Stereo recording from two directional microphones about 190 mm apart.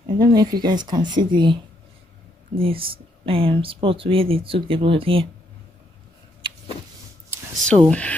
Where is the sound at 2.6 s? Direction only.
30° right (ahead or behind).